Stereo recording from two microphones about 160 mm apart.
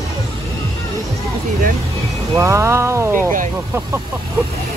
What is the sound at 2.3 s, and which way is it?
Music, 20° right (ahead or behind).